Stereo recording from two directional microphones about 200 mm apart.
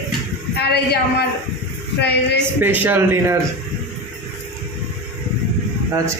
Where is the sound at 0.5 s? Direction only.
55° left (ahead or behind).